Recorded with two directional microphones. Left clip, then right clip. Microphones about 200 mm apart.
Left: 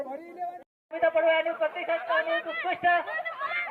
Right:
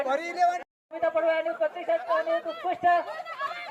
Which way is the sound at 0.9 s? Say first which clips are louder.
Left 2 dB; 80° right.